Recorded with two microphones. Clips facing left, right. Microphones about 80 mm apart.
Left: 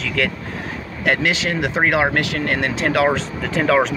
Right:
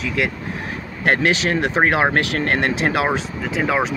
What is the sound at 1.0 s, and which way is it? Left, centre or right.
Speech, right.